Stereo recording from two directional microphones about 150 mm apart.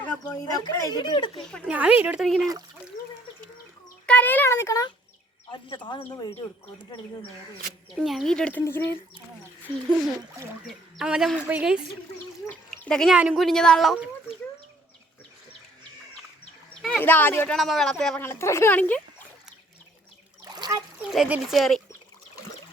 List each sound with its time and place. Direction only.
0.3 s speech: 25° left (ahead or behind)
1.6 s speech: 10° right (ahead or behind)
4.0 s speech: 10° left (ahead or behind)
5.5 s speech: 30° left (ahead or behind)
7.9 s a woman's voice: centre (ahead or behind); by 9.0 s 15° left (ahead or behind)
10.7 s a woman's voice: 5° right (ahead or behind)
12.5 s duck: 5° left (ahead or behind)
13.1 s speech: centre (ahead or behind)
17.0 s speech: 10° left (ahead or behind)
17.6 s a woman's voice: centre (ahead or behind)
18.2 s speech: 15° left (ahead or behind)
20.4 s splash: 25° right (ahead or behind)
21.0 s a woman's voice: 5° right (ahead or behind)